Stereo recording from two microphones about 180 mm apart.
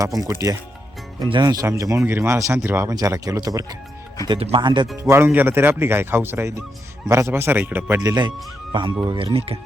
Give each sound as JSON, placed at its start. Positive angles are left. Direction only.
{"t": 0.0, "sound": "speech", "side_deg": -20}
{"t": 4.3, "sound": "speech", "side_deg": -30}
{"t": 5.0, "sound": "speech", "side_deg": -15}